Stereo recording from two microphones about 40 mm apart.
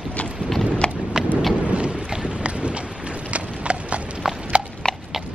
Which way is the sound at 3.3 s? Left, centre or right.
Right.